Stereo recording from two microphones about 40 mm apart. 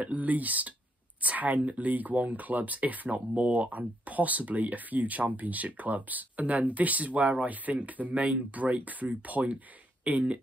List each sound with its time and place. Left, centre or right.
0.0 s speech: right